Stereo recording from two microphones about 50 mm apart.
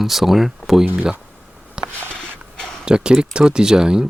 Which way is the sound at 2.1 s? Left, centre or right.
Centre.